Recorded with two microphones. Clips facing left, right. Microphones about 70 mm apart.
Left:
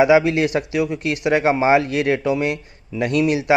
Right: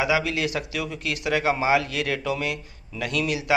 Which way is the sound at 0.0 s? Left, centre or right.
Left.